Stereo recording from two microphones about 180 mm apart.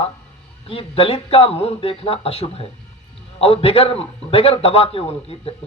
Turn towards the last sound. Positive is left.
turn(degrees=30)  # may be behind; listen again after turning